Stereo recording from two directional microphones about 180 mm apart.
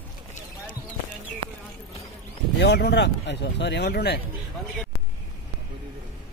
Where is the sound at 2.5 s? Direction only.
65° left (ahead or behind).